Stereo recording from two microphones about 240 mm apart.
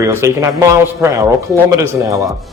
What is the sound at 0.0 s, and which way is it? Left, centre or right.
Speech, centre.